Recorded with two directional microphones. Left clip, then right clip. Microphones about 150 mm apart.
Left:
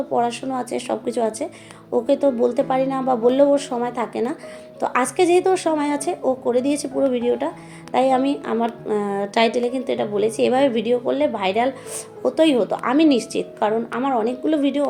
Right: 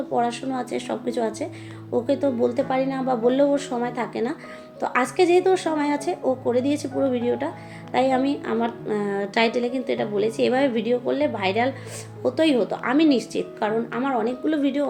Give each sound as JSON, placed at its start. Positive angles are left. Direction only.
{"t": 0.1, "sound": "a woman's voice", "side_deg": 30}